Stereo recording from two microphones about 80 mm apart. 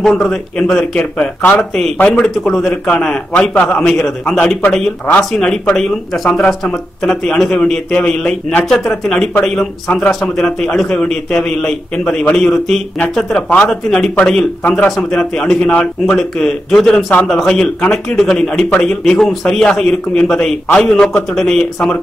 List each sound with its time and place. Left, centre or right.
0.0 s a man's voice: centre
14.6 s speech: centre
15.0 s speech: centre